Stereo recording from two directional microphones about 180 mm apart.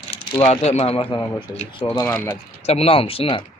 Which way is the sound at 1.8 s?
10° left (ahead or behind).